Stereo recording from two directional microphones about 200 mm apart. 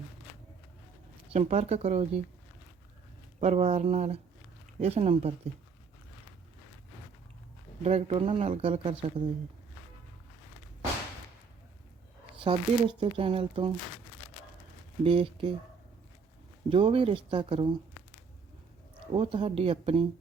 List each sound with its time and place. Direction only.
1.3 s speech: 35° right (ahead or behind)
3.4 s speech: 30° right (ahead or behind)
7.9 s speech: 30° right (ahead or behind)
12.4 s speech: 25° right (ahead or behind)
15.0 s speech: 25° right (ahead or behind)
16.6 s speech: 25° right (ahead or behind)
19.1 s speech: 25° right (ahead or behind)